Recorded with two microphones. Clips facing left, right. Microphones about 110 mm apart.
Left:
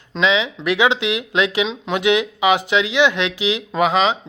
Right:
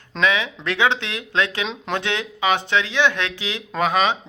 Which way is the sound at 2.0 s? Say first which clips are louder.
Left 10 dB; 15° left (ahead or behind).